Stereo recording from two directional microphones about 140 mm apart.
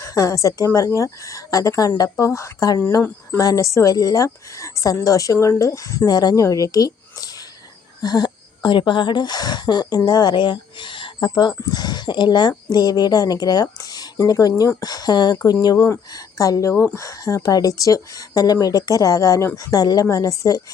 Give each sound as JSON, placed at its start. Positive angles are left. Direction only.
{"t": 0.0, "sound": "speech", "side_deg": 25}